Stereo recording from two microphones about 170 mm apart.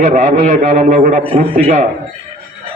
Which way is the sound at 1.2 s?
35° right (ahead or behind).